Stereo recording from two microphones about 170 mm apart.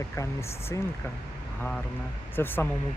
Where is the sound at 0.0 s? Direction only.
15° left (ahead or behind).